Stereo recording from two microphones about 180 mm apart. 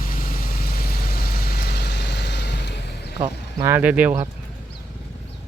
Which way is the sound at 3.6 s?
10° right (ahead or behind).